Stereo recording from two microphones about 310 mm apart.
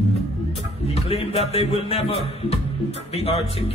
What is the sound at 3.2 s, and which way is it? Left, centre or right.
Speech, centre.